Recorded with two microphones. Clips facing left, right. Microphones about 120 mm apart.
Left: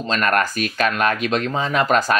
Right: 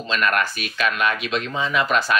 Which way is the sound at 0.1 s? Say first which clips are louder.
Left 2 dB; 40° left (ahead or behind).